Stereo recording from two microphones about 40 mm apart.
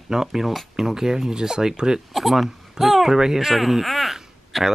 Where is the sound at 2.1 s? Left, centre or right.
Centre.